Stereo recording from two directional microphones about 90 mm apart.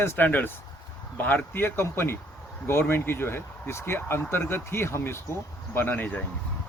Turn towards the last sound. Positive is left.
turn(degrees=20)  # may be behind; listen again after turning